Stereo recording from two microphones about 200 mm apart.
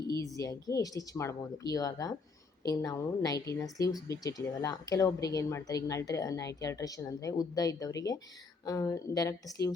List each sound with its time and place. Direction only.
0.1 s speech: 15° left (ahead or behind)